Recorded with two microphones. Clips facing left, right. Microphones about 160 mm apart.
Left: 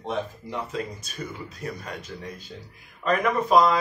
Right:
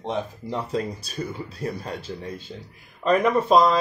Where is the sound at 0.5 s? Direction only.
35° right (ahead or behind).